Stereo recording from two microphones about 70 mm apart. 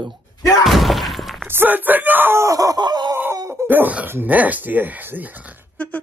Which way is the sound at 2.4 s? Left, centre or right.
Right.